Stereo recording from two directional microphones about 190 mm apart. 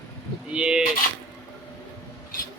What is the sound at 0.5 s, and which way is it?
Speech, 5° right (ahead or behind).